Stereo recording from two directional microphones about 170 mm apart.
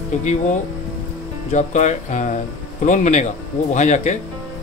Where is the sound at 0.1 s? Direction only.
45° left (ahead or behind).